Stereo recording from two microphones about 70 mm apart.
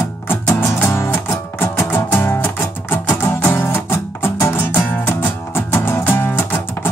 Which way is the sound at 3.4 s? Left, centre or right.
Left.